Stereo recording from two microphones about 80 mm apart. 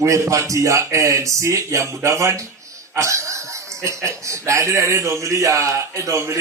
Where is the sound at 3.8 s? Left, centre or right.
Right.